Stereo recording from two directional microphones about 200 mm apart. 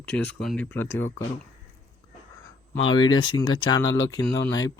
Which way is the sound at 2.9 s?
20° left (ahead or behind).